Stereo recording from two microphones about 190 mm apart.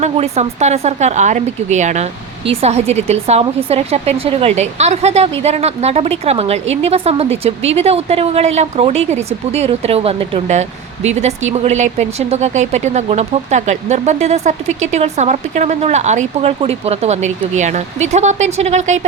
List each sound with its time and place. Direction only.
0.0 s speech: 35° right (ahead or behind)